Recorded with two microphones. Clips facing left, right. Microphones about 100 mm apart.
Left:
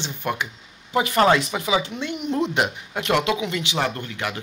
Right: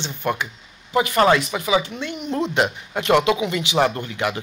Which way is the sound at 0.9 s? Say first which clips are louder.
Right 1 dB; 25° left (ahead or behind).